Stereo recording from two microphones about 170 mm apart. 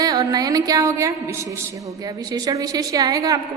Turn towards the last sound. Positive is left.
turn(degrees=-20)  # may be behind; listen again after turning